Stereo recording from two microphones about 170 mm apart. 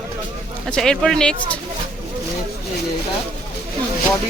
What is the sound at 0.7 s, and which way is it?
Speech, 5° left (ahead or behind).